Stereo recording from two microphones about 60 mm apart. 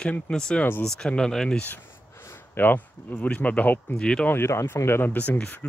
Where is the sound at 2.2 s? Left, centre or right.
Left.